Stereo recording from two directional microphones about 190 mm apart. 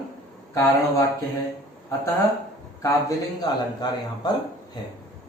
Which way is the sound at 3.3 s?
20° left (ahead or behind).